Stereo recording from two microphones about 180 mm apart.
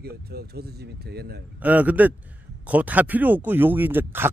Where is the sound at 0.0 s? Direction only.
60° right (ahead or behind).